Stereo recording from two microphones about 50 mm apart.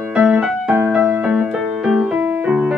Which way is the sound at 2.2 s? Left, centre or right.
Right.